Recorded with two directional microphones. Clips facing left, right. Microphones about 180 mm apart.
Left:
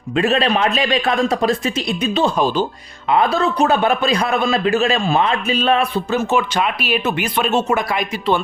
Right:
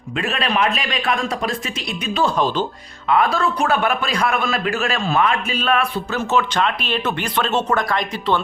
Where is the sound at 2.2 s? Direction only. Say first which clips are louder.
Even; 10° left (ahead or behind).